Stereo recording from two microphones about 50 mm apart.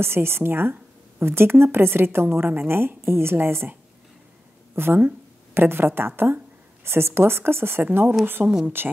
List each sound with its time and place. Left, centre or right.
0.0 s a woman's voice: right
4.7 s a woman's voice: right
7.8 s speech: right
8.8 s a woman's voice: right